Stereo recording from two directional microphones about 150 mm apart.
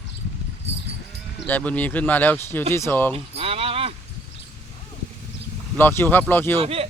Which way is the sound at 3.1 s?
40° right (ahead or behind).